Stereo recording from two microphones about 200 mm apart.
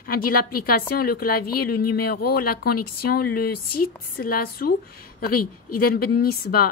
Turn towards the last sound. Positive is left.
turn(degrees=50)  # may be behind; listen again after turning